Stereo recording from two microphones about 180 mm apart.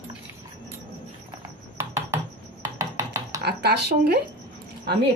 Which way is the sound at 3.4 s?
65° right (ahead or behind).